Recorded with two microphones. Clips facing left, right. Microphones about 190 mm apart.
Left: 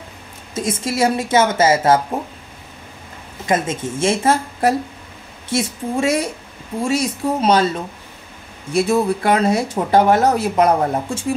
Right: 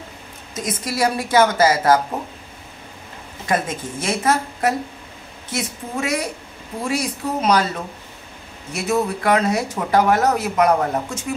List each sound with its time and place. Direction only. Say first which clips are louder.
0.6 s speech: left 3 dB; 25° left (ahead or behind)
3.4 s speech: left 3 dB; 25° left (ahead or behind)
8.7 s speech: left 5 dB; 30° left (ahead or behind)